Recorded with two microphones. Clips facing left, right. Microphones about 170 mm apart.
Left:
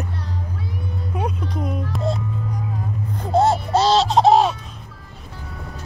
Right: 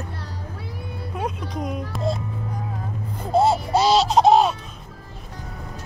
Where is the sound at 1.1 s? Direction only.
Centre (ahead or behind).